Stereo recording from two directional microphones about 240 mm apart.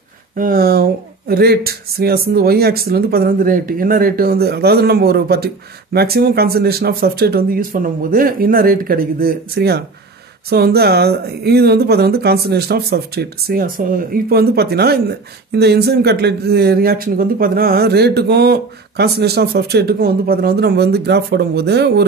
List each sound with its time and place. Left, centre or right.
0.4 s speech: right